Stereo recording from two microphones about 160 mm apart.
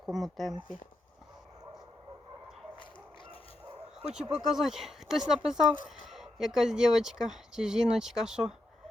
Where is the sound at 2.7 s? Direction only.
30° left (ahead or behind).